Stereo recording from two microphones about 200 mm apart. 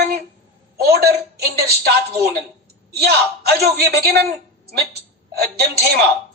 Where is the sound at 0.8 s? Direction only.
50° right (ahead or behind).